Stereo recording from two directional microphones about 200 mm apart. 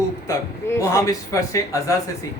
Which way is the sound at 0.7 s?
15° left (ahead or behind).